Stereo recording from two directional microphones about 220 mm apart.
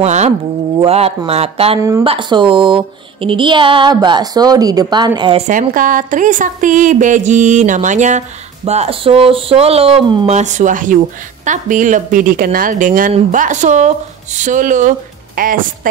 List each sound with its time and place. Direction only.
0.0 s speech: 30° right (ahead or behind)
1.8 s speech: 15° right (ahead or behind)
5.5 s speech: 35° right (ahead or behind)